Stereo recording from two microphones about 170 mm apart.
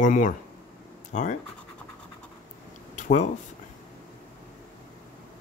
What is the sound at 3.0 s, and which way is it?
Speech, 45° left (ahead or behind).